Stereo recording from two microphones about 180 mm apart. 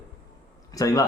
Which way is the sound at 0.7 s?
20° left (ahead or behind).